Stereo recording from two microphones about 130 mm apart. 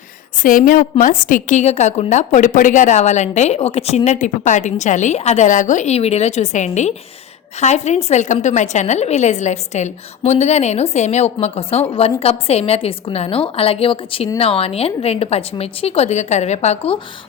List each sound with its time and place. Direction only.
0.4 s a woman's voice: 90° left; by 17.0 s 50° left (ahead or behind)